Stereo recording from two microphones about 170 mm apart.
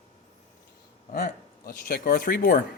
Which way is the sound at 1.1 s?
65° left (ahead or behind).